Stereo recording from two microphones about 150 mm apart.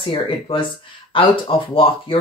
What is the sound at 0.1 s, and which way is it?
Speech, 35° left (ahead or behind).